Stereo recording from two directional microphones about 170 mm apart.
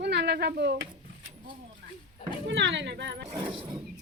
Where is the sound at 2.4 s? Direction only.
90° right.